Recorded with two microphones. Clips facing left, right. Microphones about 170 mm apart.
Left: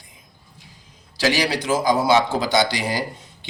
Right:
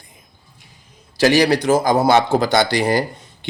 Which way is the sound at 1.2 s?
50° right (ahead or behind).